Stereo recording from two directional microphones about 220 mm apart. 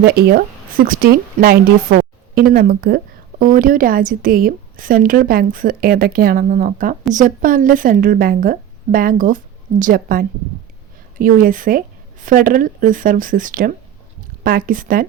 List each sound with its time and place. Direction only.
0.0 s speech: 45° right (ahead or behind)